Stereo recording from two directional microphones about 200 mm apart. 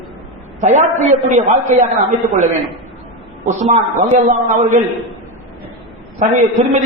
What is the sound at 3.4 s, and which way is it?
A man's voice, 35° right (ahead or behind).